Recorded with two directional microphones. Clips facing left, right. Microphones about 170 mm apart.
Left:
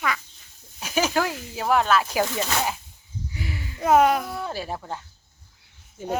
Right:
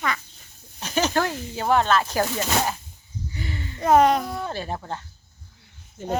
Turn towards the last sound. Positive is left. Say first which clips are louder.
# right 1 dB
turn(degrees=5)  # may be behind; listen again after turning